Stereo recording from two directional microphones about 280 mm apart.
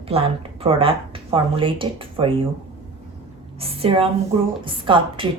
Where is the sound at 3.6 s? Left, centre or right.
Right.